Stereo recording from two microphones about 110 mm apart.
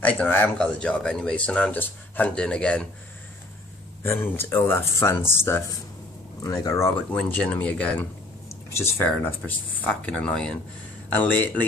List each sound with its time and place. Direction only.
0.0 s speech: 15° left (ahead or behind)
4.0 s speech: 20° left (ahead or behind)
6.4 s speech: 35° left (ahead or behind)
7.2 s speech: 15° left (ahead or behind)
8.5 s speech: 25° left (ahead or behind)
10.0 s speech: 10° left (ahead or behind)